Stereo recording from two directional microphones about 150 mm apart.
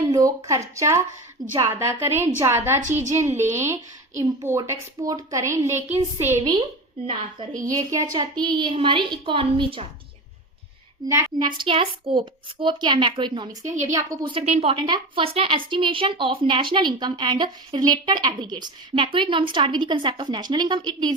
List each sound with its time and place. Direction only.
0.0 s a woman's voice: 25° right (ahead or behind)
7.7 s a woman's voice: 25° right (ahead or behind)
11.1 s a woman's voice: 15° right (ahead or behind)
11.4 s a woman's voice: 35° right (ahead or behind)
14.3 s a woman's voice: 45° right (ahead or behind); by 21.1 s 30° right (ahead or behind)